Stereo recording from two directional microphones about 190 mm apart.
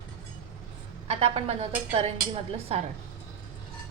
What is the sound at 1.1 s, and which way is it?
A woman's voice, 30° right (ahead or behind).